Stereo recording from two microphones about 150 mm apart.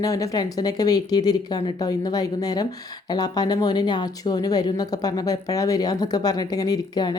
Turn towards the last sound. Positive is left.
turn(degrees=25)  # may be behind; listen again after turning